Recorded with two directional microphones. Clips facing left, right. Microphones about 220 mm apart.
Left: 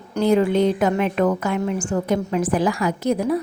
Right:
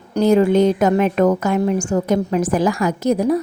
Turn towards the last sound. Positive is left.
turn(degrees=-40)  # may be behind; listen again after turning